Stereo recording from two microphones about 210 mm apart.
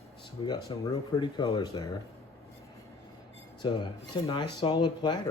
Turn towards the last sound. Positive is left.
turn(degrees=20)  # may be behind; listen again after turning